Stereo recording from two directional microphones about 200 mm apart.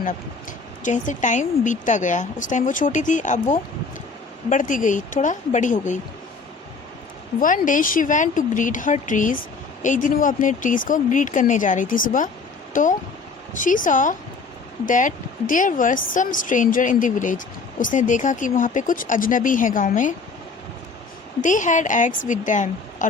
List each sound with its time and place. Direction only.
0.8 s speech: 40° left (ahead or behind)
7.3 s speech: 40° left (ahead or behind)
21.4 s speech: 40° left (ahead or behind)